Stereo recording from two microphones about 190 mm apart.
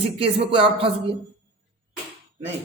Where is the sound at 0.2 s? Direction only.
30° right (ahead or behind).